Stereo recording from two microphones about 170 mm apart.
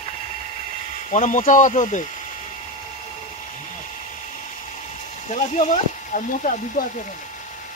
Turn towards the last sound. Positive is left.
turn(degrees=55)  # may be behind; listen again after turning